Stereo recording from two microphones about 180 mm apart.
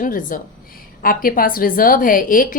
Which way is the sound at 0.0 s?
50° left (ahead or behind).